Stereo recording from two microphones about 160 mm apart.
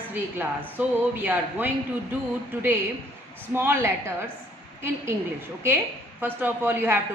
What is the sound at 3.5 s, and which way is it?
Speech, 15° right (ahead or behind).